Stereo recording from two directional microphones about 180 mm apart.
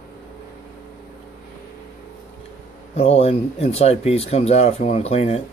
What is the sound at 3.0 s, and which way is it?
Speech, 35° left (ahead or behind).